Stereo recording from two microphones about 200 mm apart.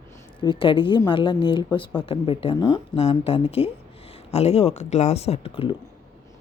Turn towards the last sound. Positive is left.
turn(degrees=30)  # may be behind; listen again after turning